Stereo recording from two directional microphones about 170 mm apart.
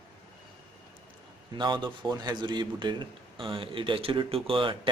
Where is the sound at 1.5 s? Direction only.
25° right (ahead or behind).